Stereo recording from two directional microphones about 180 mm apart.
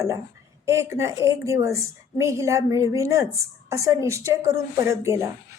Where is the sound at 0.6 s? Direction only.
15° right (ahead or behind).